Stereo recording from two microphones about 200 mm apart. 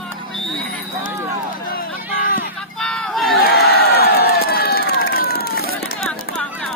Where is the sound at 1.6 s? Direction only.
45° left (ahead or behind).